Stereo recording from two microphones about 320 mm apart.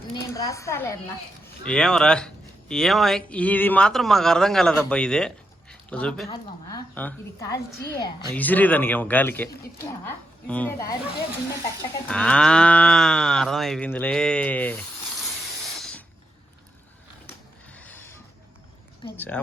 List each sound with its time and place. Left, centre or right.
0.1 s a woman's voice: centre
12.0 s speech: centre
15.8 s spray: centre
17.7 s a sound: centre
19.0 s speech: centre